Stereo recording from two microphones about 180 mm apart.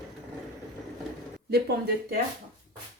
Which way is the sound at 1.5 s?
60° right (ahead or behind).